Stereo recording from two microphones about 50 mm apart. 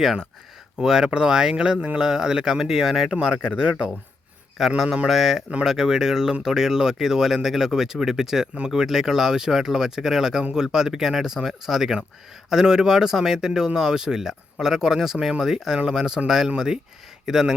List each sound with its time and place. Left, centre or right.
0.0 s speech: centre